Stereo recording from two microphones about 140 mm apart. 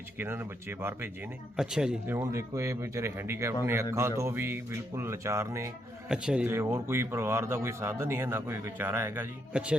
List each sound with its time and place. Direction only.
0.2 s speech: 15° right (ahead or behind)
1.5 s speech: 5° right (ahead or behind)
2.1 s speech: 20° right (ahead or behind)
6.1 s speech: 5° right (ahead or behind)